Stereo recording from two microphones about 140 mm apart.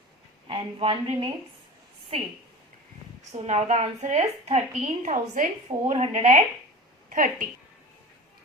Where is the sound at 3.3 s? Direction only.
55° right (ahead or behind).